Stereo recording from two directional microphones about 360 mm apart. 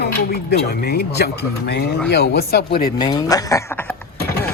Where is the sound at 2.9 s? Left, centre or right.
Centre.